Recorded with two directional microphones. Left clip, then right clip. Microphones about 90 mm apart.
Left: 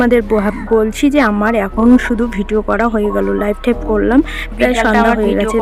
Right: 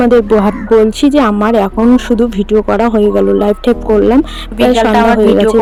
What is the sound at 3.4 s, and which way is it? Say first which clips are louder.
Speech: right 5 dB; 30° right (ahead or behind).